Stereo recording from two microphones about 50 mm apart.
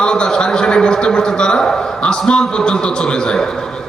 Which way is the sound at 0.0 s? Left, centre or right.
Centre.